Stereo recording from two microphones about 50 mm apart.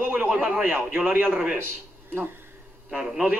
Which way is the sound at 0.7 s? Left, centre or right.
Right.